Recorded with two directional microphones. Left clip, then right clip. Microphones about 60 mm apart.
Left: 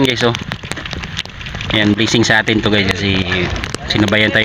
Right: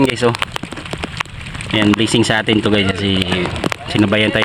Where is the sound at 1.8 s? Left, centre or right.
Centre.